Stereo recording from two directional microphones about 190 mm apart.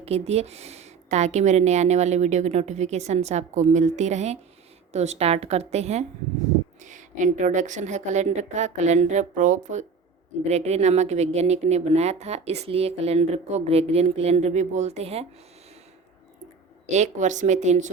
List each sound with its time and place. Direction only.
0.0 s a woman's voice: 35° right (ahead or behind)
16.9 s a woman's voice: 40° right (ahead or behind)